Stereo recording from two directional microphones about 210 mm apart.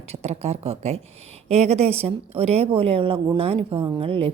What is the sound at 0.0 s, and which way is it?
A woman's voice, 30° right (ahead or behind).